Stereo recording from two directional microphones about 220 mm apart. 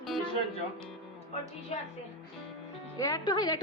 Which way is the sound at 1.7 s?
30° left (ahead or behind).